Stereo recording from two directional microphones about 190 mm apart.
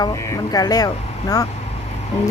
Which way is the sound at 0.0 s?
20° left (ahead or behind).